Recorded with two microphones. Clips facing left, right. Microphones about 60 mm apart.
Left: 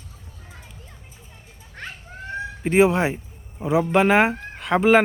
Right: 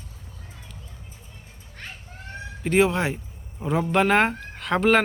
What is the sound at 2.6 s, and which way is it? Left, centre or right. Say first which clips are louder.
Speech: left 3 dB; centre.